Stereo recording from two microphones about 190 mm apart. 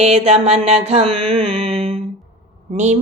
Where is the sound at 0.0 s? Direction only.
35° right (ahead or behind).